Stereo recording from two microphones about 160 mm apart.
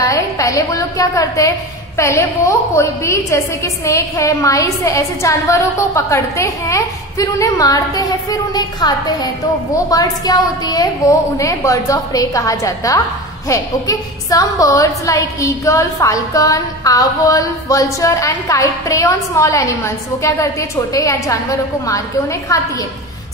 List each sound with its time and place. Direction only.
0.0 s a woman's voice: 20° left (ahead or behind)